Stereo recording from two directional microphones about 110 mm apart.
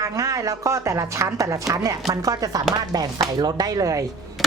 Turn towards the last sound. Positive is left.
turn(degrees=-30)  # may be behind; listen again after turning